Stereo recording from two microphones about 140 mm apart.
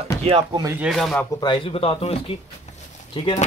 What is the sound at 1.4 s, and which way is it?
Speech, 35° left (ahead or behind).